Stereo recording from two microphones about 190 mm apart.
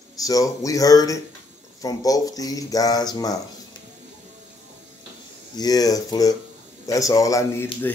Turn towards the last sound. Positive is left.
turn(degrees=15)  # may be behind; listen again after turning